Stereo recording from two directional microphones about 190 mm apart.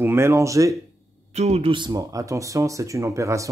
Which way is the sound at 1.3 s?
35° right (ahead or behind).